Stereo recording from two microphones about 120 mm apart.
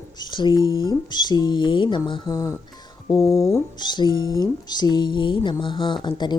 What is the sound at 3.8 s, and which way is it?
Speech, 40° left (ahead or behind).